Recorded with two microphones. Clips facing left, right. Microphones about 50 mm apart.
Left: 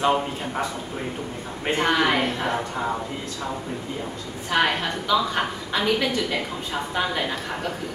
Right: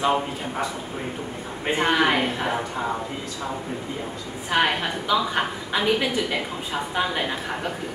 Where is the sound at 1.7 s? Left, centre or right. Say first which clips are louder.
Even; centre.